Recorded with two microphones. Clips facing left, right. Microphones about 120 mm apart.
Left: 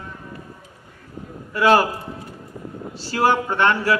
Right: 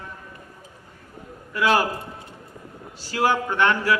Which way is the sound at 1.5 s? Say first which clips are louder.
Left 5 dB; 40° left (ahead or behind).